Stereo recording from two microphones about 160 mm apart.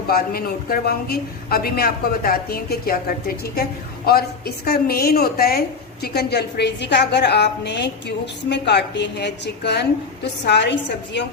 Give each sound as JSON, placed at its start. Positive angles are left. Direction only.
{"t": 0.1, "sound": "a woman's voice", "side_deg": 70}